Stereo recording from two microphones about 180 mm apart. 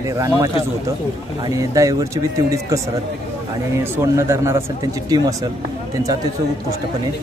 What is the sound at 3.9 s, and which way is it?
A man's voice, 15° right (ahead or behind).